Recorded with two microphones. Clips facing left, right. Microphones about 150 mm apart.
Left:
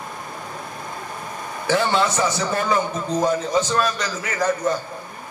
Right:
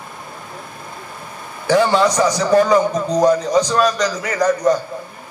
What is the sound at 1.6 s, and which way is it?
A man's voice, 40° right (ahead or behind).